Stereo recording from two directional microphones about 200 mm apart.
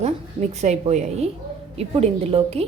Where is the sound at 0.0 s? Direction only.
35° right (ahead or behind).